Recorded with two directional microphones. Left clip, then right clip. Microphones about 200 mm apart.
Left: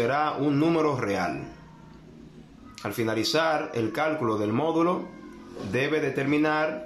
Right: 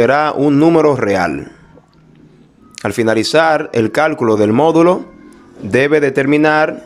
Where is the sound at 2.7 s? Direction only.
50° right (ahead or behind).